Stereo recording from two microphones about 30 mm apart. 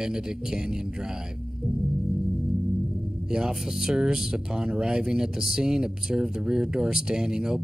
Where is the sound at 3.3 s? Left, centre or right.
Right.